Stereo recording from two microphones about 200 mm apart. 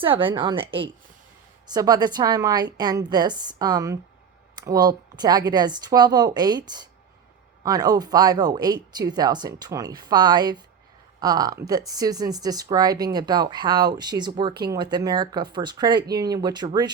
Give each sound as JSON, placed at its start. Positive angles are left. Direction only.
{"t": 0.0, "sound": "speech", "side_deg": -25}